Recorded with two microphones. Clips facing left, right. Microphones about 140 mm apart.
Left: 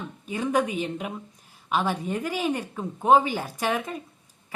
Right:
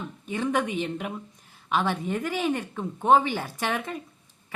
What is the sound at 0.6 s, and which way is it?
A woman's voice, 20° left (ahead or behind).